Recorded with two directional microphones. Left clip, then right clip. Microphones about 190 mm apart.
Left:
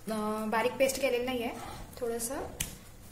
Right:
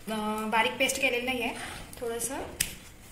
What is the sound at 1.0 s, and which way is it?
A woman's voice, 20° left (ahead or behind).